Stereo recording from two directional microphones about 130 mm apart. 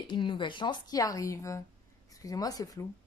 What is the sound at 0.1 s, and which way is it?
A woman's voice, 40° left (ahead or behind).